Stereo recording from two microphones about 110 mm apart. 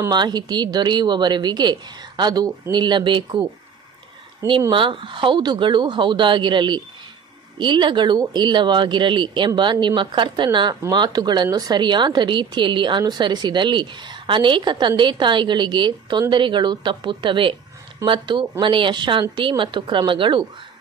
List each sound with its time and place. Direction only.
0.1 s a woman's voice: 40° right (ahead or behind)
4.5 s a woman's voice: 50° right (ahead or behind)